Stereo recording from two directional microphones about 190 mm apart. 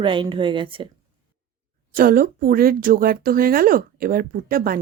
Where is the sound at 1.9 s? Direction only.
50° right (ahead or behind).